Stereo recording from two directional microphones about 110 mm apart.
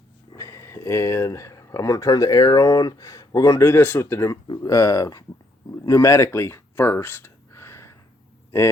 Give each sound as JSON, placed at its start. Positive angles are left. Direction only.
{"t": 0.3, "sound": "speech", "side_deg": 25}